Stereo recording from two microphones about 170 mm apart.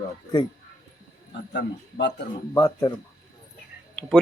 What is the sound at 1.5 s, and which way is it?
Speech, 90° left.